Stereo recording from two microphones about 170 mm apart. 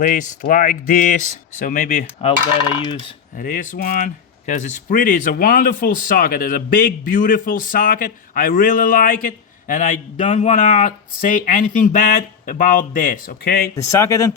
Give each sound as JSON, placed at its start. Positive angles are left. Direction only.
{"t": 0.0, "sound": "speech", "side_deg": 50}
{"t": 3.3, "sound": "speech", "side_deg": 50}
{"t": 13.8, "sound": "speech", "side_deg": 15}